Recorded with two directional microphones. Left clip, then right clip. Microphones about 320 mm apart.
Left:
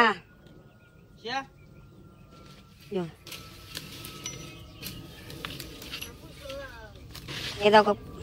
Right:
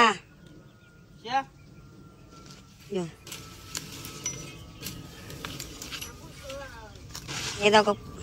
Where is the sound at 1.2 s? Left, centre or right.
Centre.